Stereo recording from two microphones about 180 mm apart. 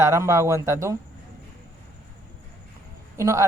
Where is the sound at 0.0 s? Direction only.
15° right (ahead or behind).